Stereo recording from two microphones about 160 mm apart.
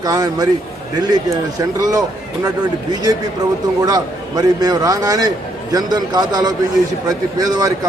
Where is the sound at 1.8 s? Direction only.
25° right (ahead or behind).